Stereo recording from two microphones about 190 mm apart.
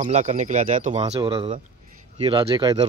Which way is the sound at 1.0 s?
25° right (ahead or behind).